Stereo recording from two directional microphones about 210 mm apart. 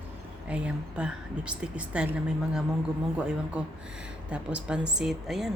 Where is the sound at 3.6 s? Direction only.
5° right (ahead or behind).